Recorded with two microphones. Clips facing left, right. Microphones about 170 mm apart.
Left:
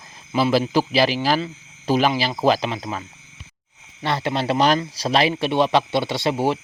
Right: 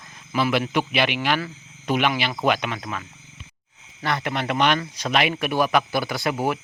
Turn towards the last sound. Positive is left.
turn(degrees=25)  # may be behind; listen again after turning